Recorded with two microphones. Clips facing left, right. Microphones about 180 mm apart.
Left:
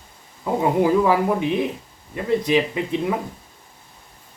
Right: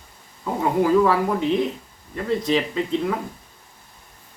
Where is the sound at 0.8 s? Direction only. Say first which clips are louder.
Right 1 dB; 15° left (ahead or behind).